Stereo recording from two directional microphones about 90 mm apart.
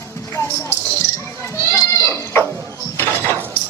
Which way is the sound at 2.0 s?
30° left (ahead or behind).